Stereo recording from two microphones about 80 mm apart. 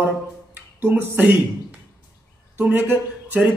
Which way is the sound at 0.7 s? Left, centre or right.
Right.